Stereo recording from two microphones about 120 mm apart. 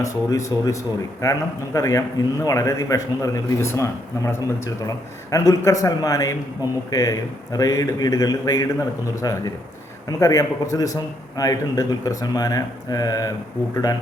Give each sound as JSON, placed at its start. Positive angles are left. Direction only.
{"t": 0.0, "sound": "a man's voice", "side_deg": 25}